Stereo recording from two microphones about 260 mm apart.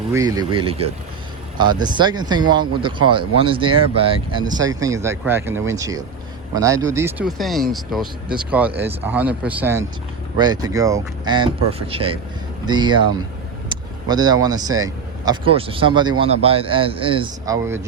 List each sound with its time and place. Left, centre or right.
0.1 s speech: centre